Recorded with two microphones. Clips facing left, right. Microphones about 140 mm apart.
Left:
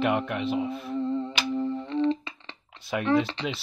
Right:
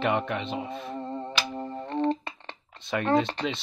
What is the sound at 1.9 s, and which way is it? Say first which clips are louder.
Music: even; 50° right (ahead or behind).